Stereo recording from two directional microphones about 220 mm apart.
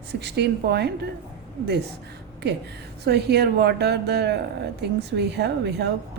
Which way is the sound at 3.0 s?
50° right (ahead or behind).